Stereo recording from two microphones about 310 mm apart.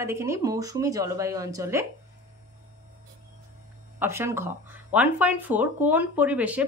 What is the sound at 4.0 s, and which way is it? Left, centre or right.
Speech, centre.